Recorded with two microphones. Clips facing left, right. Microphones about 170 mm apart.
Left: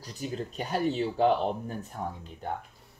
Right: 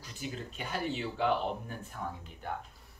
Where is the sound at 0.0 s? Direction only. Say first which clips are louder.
Left 6 dB; 40° left (ahead or behind).